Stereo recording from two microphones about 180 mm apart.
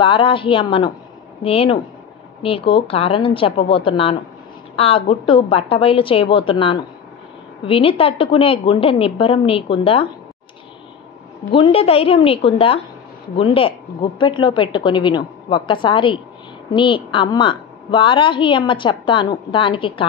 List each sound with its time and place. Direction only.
0.0 s a woman's voice: 30° left (ahead or behind)
11.5 s a woman's voice: 30° left (ahead or behind)